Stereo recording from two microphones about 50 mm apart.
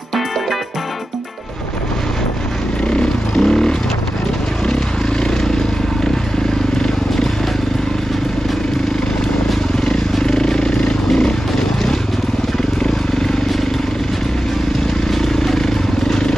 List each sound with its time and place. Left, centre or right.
2.9 s vehicle: centre
10.2 s vehicle: centre
15.0 s vehicle: centre